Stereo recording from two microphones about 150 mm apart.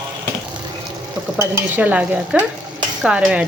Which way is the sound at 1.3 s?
10° right (ahead or behind).